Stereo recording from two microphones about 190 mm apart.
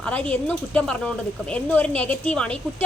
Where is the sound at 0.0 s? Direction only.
5° left (ahead or behind).